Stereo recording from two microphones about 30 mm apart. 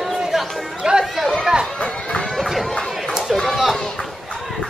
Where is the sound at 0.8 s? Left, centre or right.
Right.